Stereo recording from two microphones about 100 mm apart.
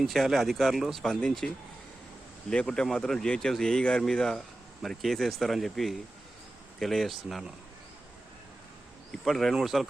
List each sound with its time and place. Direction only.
0.0 s speech: centre (ahead or behind)
2.5 s speech: 5° left (ahead or behind)
9.2 s speech: centre (ahead or behind)